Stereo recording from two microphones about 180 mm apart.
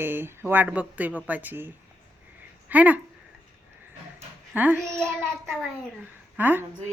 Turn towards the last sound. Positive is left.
turn(degrees=-10)  # may be behind; listen again after turning